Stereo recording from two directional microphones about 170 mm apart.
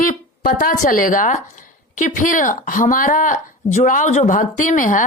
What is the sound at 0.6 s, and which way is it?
A woman's voice, 50° left (ahead or behind).